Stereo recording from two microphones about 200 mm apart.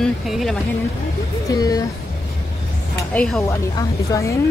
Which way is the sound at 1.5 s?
20° left (ahead or behind).